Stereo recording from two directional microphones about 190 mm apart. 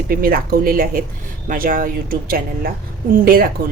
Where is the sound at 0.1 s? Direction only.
50° right (ahead or behind).